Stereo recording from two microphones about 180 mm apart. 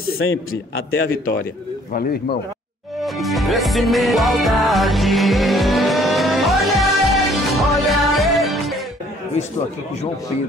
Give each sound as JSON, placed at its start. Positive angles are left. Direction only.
{"t": 0.2, "sound": "a man's voice", "side_deg": 90}
{"t": 3.0, "sound": "music", "side_deg": 0}